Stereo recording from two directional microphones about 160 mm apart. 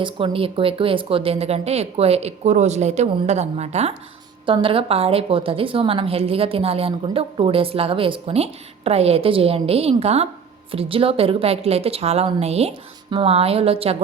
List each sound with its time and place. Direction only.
0.0 s a woman's voice: 35° right (ahead or behind)